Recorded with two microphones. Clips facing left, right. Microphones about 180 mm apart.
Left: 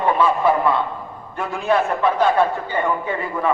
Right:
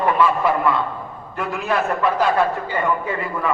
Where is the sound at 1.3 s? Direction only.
25° left (ahead or behind).